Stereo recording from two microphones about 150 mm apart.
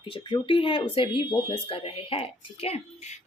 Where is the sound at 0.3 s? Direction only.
35° left (ahead or behind).